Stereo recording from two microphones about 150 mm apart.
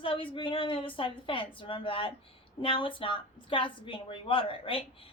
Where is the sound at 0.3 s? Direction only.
35° left (ahead or behind).